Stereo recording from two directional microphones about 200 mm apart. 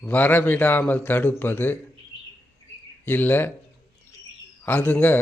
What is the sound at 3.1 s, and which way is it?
Speech, 10° left (ahead or behind).